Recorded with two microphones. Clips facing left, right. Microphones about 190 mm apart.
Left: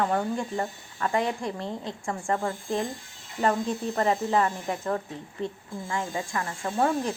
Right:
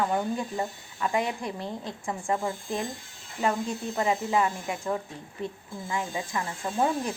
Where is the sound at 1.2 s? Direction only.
25° left (ahead or behind).